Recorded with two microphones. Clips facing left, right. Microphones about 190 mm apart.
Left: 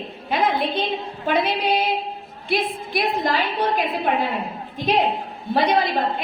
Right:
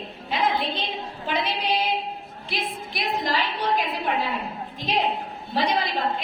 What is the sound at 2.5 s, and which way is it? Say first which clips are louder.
Speech: left 8 dB; 55° left (ahead or behind).